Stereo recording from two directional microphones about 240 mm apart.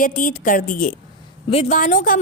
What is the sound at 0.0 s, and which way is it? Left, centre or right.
A woman's voice, left.